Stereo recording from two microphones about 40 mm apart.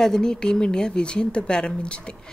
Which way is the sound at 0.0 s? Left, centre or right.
Centre.